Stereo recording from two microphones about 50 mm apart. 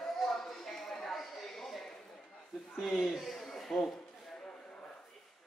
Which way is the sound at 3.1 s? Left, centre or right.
Centre.